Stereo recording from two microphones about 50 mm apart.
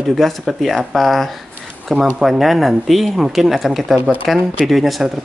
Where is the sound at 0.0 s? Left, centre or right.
Centre.